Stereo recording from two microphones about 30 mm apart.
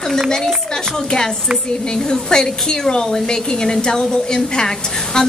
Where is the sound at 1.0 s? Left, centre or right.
Left.